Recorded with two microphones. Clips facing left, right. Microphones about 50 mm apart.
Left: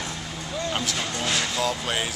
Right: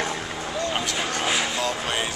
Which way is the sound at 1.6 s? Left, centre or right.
Centre.